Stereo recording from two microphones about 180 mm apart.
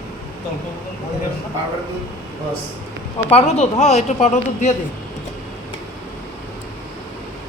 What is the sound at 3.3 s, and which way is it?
A man's voice, 35° left (ahead or behind).